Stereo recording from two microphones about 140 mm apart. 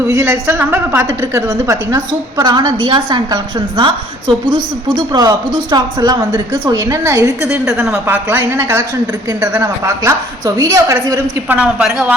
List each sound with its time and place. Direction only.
0.0 s a woman's voice: 15° right (ahead or behind)
7.4 s a woman's voice: 5° right (ahead or behind)
8.0 s a woman's voice: 15° right (ahead or behind)
11.4 s a woman's voice: 10° right (ahead or behind)